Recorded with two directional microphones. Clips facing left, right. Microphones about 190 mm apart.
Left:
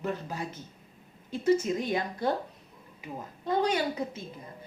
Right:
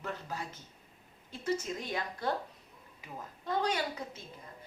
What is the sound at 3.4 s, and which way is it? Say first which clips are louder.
Speech: left 5 dB; 20° left (ahead or behind).